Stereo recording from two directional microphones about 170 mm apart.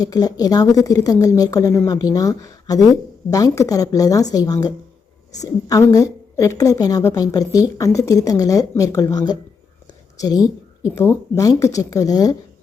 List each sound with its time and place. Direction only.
0.0 s a woman's voice: 20° left (ahead or behind)
9.8 s a sound: 20° left (ahead or behind)
10.9 s a woman's voice: 15° left (ahead or behind)